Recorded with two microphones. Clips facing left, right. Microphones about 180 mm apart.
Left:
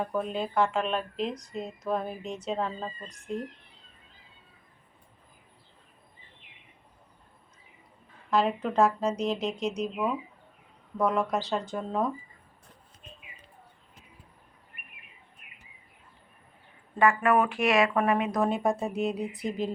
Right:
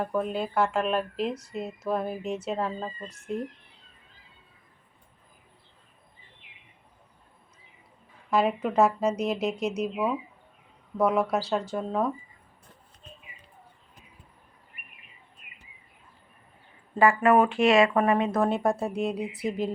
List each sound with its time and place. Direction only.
0.0 s a woman's voice: 5° right (ahead or behind)
8.3 s a woman's voice: 10° right (ahead or behind)
17.0 s speech: 30° right (ahead or behind)
18.3 s a woman's voice: centre (ahead or behind)